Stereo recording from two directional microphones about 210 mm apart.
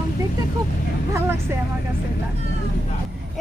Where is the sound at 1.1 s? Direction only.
10° right (ahead or behind).